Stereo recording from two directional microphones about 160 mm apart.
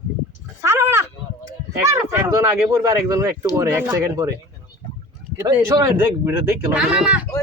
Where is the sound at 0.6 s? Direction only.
15° right (ahead or behind).